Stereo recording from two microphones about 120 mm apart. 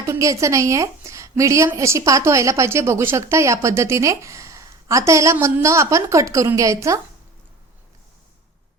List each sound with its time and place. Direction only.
0.0 s a woman's voice: 25° right (ahead or behind)